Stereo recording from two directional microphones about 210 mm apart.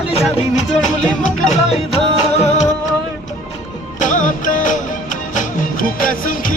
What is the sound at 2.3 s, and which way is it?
Music, 30° left (ahead or behind).